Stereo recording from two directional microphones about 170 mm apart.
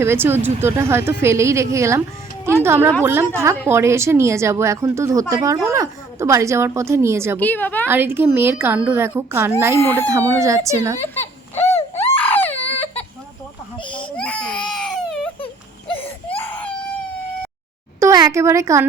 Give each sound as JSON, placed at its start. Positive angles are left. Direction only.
{"t": 0.0, "sound": "speech", "side_deg": -15}
{"t": 7.3, "sound": "a woman's voice", "side_deg": 10}
{"t": 7.9, "sound": "speech", "side_deg": -10}
{"t": 9.7, "sound": "a woman's voice", "side_deg": 15}
{"t": 10.1, "sound": "speech", "side_deg": -20}
{"t": 11.7, "sound": "baby cry", "side_deg": 10}
{"t": 14.2, "sound": "baby cry", "side_deg": 5}
{"t": 15.9, "sound": "wheeze", "side_deg": 35}
{"t": 18.0, "sound": "a woman's voice", "side_deg": -20}